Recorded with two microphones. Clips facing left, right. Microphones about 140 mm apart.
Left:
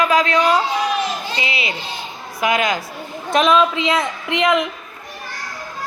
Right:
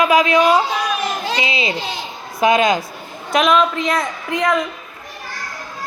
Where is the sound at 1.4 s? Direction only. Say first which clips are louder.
Right 4 dB; 20° right (ahead or behind).